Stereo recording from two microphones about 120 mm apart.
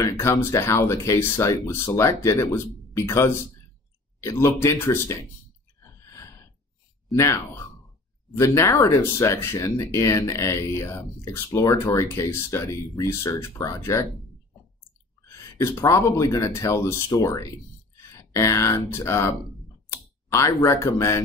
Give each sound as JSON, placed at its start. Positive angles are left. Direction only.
{"t": 0.0, "sound": "speech", "side_deg": 25}
{"t": 5.8, "sound": "a sound", "side_deg": 25}
{"t": 7.1, "sound": "speech", "side_deg": 25}
{"t": 15.2, "sound": "speech", "side_deg": 25}